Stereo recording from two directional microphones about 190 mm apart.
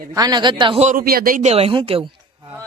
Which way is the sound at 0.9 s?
50° right (ahead or behind).